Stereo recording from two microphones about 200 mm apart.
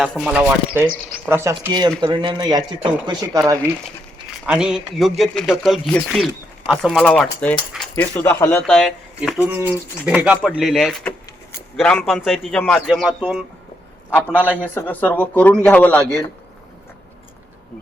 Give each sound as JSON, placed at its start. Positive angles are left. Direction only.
{"t": 0.0, "sound": "speech", "side_deg": 0}
{"t": 4.4, "sound": "speech", "side_deg": -5}
{"t": 14.2, "sound": "a man's voice", "side_deg": 10}